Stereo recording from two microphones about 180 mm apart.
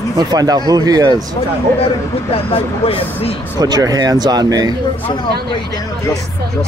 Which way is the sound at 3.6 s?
20° right (ahead or behind).